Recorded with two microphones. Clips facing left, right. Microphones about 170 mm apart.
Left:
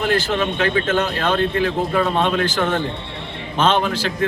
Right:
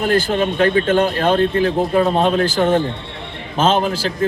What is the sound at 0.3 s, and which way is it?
A man's voice, 40° right (ahead or behind).